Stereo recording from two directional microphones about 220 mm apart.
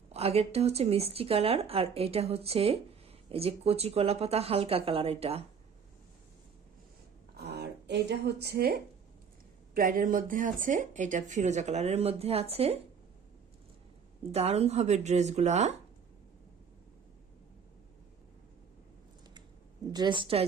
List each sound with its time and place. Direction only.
0.1 s speech: 30° right (ahead or behind)
7.3 s a sound: 50° right (ahead or behind)
9.7 s speech: 40° right (ahead or behind)
14.3 s speech: 30° right (ahead or behind)
19.9 s speech: 20° right (ahead or behind)